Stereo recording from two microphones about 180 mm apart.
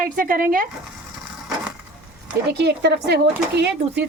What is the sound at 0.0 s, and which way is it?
Speech, 50° right (ahead or behind).